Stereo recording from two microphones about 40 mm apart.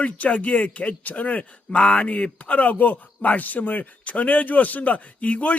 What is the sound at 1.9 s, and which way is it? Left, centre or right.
A man's voice, left.